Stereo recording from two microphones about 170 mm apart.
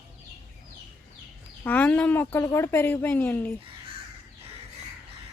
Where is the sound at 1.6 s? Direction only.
10° left (ahead or behind).